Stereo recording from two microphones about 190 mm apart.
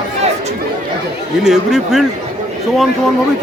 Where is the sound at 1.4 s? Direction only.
Centre (ahead or behind).